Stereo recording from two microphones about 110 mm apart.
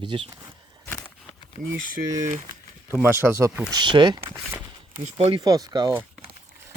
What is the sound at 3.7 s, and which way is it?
Speech, 45° right (ahead or behind).